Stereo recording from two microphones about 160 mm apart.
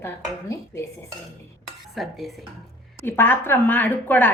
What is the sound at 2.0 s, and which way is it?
Speech, centre (ahead or behind).